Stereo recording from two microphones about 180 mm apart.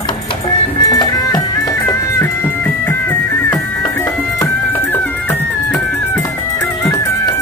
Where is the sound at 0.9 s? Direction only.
20° left (ahead or behind).